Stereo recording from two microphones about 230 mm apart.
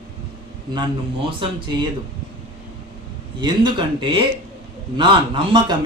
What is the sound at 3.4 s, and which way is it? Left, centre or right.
Speech, right.